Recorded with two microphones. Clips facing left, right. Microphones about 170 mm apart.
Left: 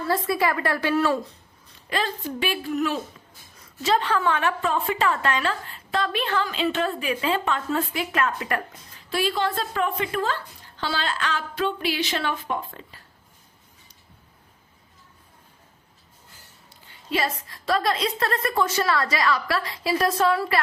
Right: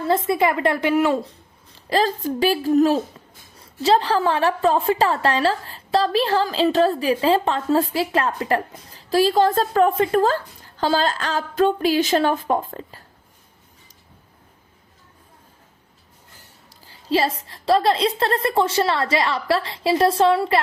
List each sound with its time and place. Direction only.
0.1 s a woman's voice: 20° right (ahead or behind)
1.9 s a woman's voice: 40° right (ahead or behind)
16.8 s a woman's voice: 35° right (ahead or behind)